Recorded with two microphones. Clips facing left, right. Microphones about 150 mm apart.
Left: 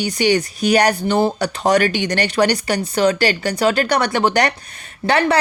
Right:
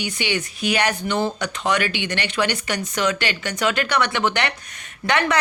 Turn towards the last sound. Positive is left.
turn(degrees=35)  # may be behind; listen again after turning